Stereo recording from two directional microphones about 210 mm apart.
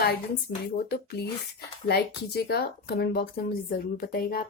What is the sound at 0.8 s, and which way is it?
Speech, 50° left (ahead or behind).